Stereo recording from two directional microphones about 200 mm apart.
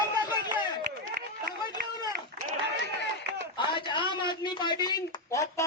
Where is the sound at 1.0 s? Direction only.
45° right (ahead or behind).